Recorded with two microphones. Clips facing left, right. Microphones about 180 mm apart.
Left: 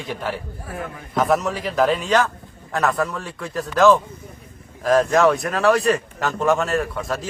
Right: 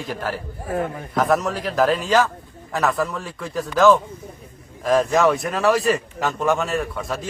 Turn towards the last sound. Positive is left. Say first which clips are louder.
# left 2 dB
turn(degrees=0)  # may be behind; listen again after turning